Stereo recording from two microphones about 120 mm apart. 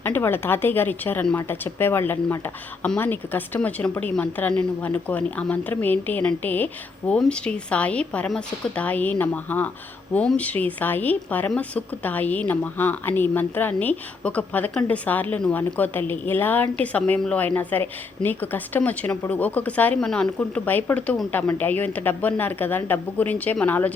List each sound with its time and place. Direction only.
0.0 s a woman's voice: 15° left (ahead or behind)